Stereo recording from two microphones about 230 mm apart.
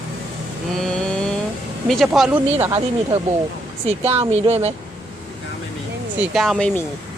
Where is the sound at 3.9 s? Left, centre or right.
Right.